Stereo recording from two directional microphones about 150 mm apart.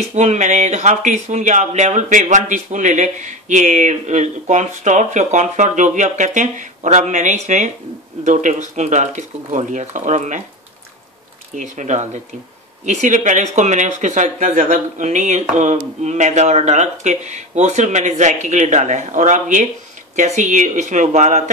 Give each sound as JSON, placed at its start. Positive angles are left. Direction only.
{"t": 0.1, "sound": "speech", "side_deg": -50}
{"t": 11.5, "sound": "speech", "side_deg": -55}